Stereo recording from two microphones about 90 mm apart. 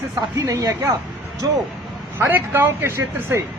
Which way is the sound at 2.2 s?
25° right (ahead or behind).